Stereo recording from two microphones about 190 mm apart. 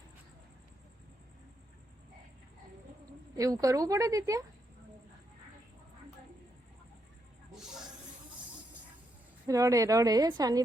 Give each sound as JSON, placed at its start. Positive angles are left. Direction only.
{"t": 3.3, "sound": "a woman's voice", "side_deg": -20}
{"t": 7.5, "sound": "a sound", "side_deg": 0}
{"t": 9.5, "sound": "speech", "side_deg": -15}